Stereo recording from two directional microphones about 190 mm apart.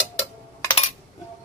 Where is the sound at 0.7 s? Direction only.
35° left (ahead or behind).